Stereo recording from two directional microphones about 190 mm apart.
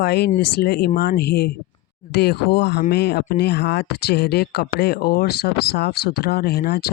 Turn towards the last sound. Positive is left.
turn(degrees=55)  # may be behind; listen again after turning